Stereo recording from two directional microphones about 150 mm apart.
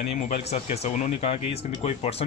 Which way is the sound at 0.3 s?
45° left (ahead or behind).